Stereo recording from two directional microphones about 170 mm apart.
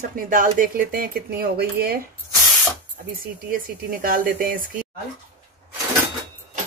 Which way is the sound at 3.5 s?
55° right (ahead or behind).